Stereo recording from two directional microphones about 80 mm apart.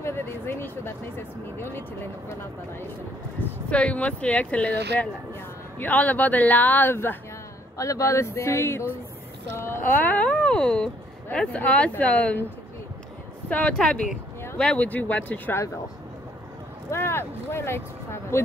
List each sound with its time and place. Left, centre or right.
0.0 s speech: left
3.7 s speech: centre
7.7 s speech: left; by 12.4 s centre
13.5 s speech: centre
16.9 s speech: left